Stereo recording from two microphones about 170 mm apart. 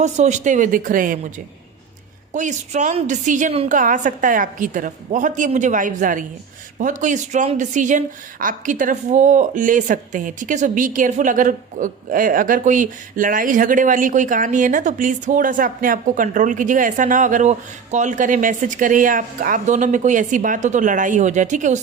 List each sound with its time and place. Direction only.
0.0 s speech: 45° right (ahead or behind)
2.3 s speech: 45° right (ahead or behind)